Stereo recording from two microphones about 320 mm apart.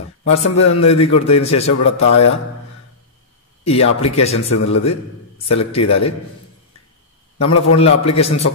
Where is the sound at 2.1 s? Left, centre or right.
Left.